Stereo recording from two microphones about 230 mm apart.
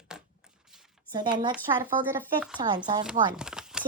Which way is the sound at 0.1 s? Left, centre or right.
Centre.